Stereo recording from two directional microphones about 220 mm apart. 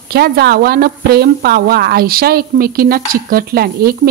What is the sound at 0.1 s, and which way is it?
A woman's voice, 45° right (ahead or behind).